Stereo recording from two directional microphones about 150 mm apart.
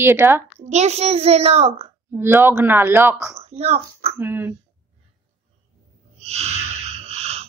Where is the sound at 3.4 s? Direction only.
45° right (ahead or behind).